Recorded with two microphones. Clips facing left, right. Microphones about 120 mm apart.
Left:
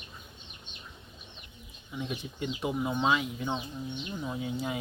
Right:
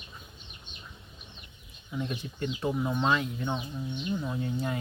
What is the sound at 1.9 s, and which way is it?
Speech, centre (ahead or behind).